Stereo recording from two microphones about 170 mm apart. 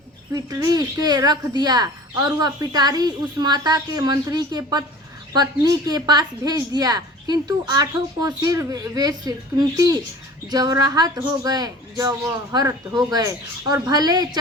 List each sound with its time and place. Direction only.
0.3 s a woman's voice: 20° right (ahead or behind)